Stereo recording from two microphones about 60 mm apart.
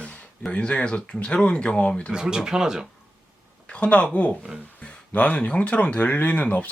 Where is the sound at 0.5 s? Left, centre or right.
Centre.